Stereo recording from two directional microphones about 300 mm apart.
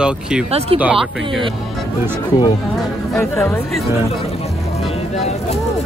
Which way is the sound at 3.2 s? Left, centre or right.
Centre.